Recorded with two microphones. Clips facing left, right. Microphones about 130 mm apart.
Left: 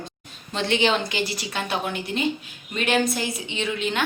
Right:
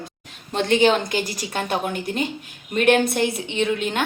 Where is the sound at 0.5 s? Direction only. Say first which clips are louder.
Right 5 dB; 45° right (ahead or behind).